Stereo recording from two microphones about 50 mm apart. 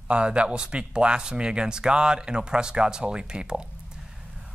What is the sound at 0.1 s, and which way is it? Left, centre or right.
Speech, right.